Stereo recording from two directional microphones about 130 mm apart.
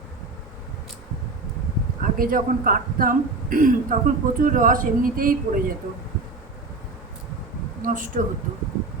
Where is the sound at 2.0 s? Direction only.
90° right.